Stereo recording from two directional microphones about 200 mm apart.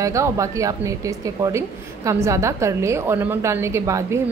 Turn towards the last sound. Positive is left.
turn(degrees=-15)  # may be behind; listen again after turning